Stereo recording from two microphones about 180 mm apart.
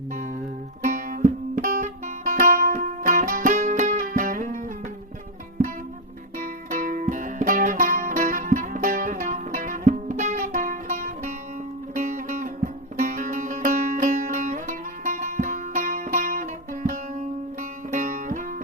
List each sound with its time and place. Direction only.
0.8 s music: 50° right (ahead or behind)
6.4 s music: 50° right (ahead or behind)